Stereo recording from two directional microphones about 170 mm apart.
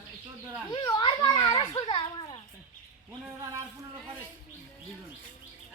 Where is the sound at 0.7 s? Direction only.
25° left (ahead or behind).